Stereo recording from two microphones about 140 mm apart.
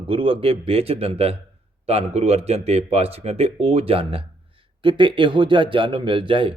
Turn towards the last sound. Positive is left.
turn(degrees=-40)  # may be behind; listen again after turning